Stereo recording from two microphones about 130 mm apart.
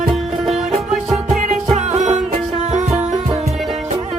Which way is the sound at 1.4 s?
65° right (ahead or behind).